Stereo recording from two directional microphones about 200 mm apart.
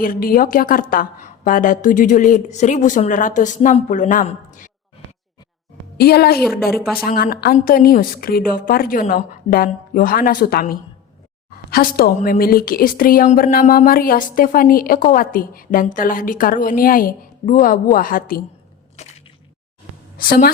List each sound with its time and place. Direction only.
0.0 s a woman's voice: 45° left (ahead or behind)
6.0 s a woman's voice: 50° left (ahead or behind)
6.4 s speech: centre (ahead or behind)
7.0 s a woman's voice: 50° left (ahead or behind)
19.0 s a sound: 35° left (ahead or behind)
20.1 s a woman's voice: 45° left (ahead or behind)